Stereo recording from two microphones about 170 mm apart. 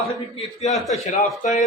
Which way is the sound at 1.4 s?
45° left (ahead or behind).